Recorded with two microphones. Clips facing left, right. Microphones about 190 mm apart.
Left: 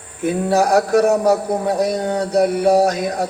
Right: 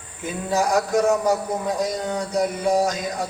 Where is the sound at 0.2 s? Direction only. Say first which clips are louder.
Left 7 dB; 65° left (ahead or behind).